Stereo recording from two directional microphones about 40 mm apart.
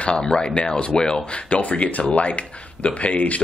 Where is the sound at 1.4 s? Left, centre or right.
Left.